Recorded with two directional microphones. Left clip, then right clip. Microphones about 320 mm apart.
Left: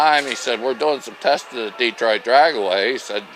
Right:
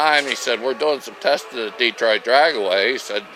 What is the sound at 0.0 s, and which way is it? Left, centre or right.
Speech, centre.